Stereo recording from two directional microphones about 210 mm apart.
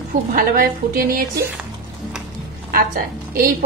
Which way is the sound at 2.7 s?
45° right (ahead or behind).